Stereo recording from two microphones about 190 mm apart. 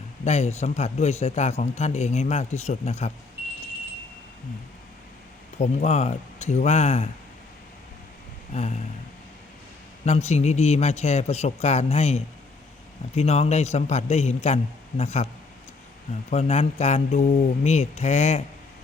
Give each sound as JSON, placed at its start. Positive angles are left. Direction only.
{"t": 0.3, "sound": "a man's voice", "side_deg": 35}
{"t": 5.5, "sound": "a man's voice", "side_deg": 35}
{"t": 8.5, "sound": "a man's voice", "side_deg": 35}
{"t": 10.1, "sound": "a man's voice", "side_deg": 35}
{"t": 16.3, "sound": "a man's voice", "side_deg": 35}